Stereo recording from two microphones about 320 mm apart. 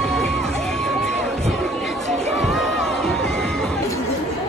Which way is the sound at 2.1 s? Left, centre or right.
Centre.